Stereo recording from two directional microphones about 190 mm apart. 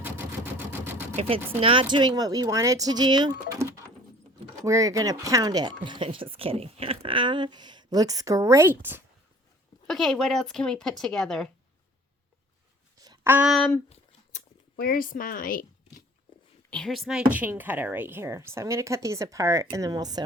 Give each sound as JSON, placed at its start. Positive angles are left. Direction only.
{"t": 0.0, "sound": "a sound", "side_deg": -10}
{"t": 1.1, "sound": "speech", "side_deg": -30}
{"t": 9.8, "sound": "speech", "side_deg": 0}
{"t": 13.0, "sound": "a sound", "side_deg": -15}
{"t": 14.8, "sound": "speech", "side_deg": 50}
{"t": 16.6, "sound": "speech", "side_deg": 5}